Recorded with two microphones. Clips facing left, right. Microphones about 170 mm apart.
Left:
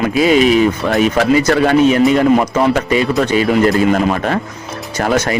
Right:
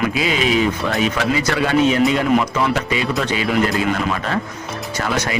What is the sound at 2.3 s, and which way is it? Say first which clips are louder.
A man's voice: left 5 dB; 45° left (ahead or behind).